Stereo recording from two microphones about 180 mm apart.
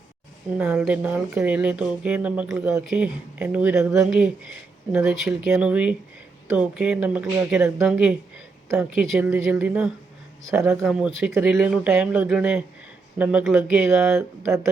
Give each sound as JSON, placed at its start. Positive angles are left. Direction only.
{"t": 0.5, "sound": "speech", "side_deg": -5}
{"t": 10.8, "sound": "speech", "side_deg": -5}